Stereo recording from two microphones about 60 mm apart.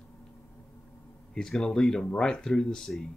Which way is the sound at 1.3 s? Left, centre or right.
Centre.